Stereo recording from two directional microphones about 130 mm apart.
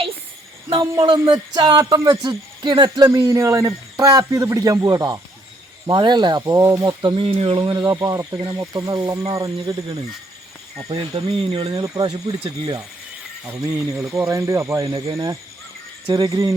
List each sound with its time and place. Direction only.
0.8 s speech: 30° right (ahead or behind)
7.0 s speech: 40° right (ahead or behind)
11.3 s speech: 45° right (ahead or behind)
11.7 s speech: 30° right (ahead or behind)
13.4 s speech: 25° right (ahead or behind)
16.0 s speech: 40° right (ahead or behind)
16.3 s speech: 25° right (ahead or behind)